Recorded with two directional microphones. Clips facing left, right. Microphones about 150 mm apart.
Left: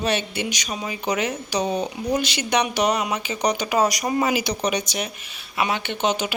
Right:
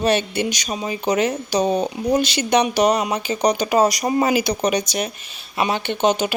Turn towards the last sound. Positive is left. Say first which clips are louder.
# right 5 dB
turn(degrees=-40)  # may be behind; listen again after turning